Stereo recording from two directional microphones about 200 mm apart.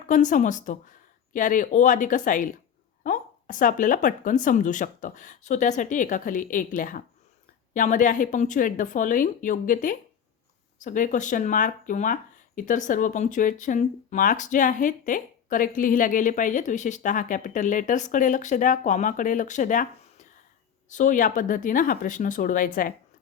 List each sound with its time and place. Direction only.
0.1 s speech: 40° left (ahead or behind)